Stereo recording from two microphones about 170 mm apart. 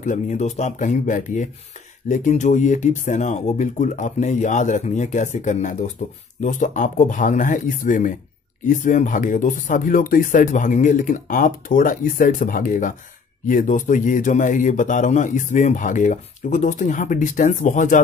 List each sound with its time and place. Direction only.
0.0 s speech: 45° left (ahead or behind)